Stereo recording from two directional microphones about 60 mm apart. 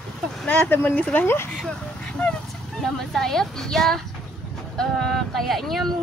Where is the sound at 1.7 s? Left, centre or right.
Centre.